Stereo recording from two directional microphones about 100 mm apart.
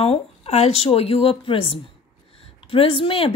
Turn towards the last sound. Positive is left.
turn(degrees=65)  # may be behind; listen again after turning